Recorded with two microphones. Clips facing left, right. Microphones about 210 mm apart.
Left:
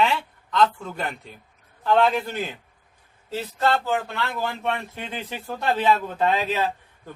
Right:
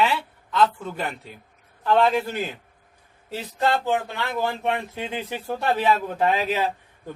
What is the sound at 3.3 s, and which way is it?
A man's voice, 15° right (ahead or behind).